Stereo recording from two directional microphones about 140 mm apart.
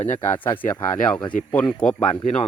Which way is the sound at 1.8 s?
10° left (ahead or behind).